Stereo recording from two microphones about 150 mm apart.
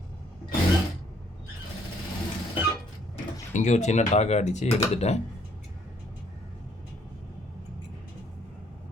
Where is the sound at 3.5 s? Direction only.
50° left (ahead or behind).